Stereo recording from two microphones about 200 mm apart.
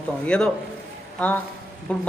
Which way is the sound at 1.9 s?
5° left (ahead or behind).